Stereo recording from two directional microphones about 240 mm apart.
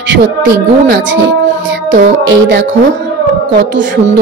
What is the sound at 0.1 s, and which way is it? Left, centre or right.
Speech, right.